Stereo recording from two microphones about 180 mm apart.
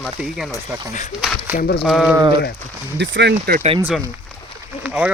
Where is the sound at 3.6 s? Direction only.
30° right (ahead or behind).